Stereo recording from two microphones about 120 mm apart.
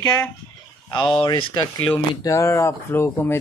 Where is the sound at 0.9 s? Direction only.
45° left (ahead or behind).